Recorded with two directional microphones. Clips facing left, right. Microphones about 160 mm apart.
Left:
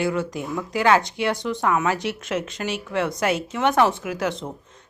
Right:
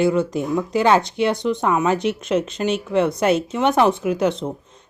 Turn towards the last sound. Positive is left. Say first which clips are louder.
# right 4 dB
turn(degrees=-20)  # may be behind; listen again after turning